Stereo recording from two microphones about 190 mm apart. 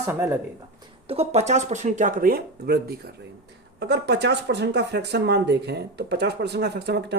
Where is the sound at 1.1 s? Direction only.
35° right (ahead or behind).